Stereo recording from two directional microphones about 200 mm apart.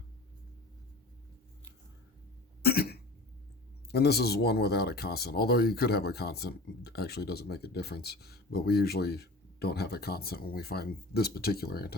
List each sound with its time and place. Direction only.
2.6 s cough: 50° left (ahead or behind)
3.9 s speech: 55° left (ahead or behind)